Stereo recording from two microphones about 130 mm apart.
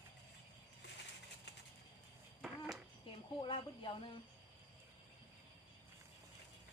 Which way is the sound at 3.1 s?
40° left (ahead or behind).